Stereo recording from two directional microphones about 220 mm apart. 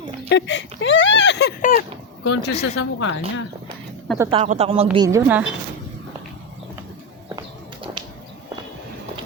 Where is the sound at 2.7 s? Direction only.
60° left (ahead or behind).